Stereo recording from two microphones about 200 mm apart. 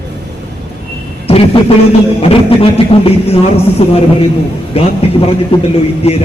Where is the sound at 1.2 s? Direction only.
30° left (ahead or behind).